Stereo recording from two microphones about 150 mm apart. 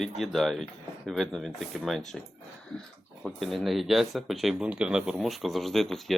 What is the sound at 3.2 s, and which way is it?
Speech, centre (ahead or behind).